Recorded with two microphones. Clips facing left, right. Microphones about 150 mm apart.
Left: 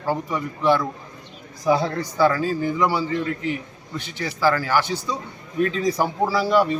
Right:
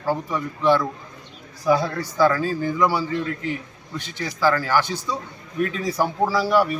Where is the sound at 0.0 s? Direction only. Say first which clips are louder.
Even; 15° left (ahead or behind).